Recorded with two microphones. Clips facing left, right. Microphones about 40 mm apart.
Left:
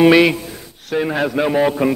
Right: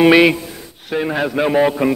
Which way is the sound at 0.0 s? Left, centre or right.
Centre.